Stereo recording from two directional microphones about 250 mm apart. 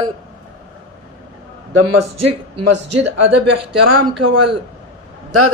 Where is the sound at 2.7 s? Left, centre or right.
Right.